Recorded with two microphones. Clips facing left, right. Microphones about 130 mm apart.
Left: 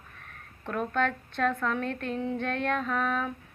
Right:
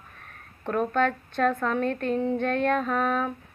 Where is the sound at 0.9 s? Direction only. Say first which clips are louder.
Right 4 dB; 5° right (ahead or behind).